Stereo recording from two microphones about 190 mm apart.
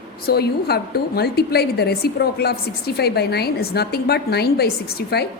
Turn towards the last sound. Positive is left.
turn(degrees=55)  # may be behind; listen again after turning